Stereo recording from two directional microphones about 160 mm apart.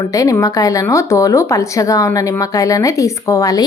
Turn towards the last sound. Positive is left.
turn(degrees=20)  # may be behind; listen again after turning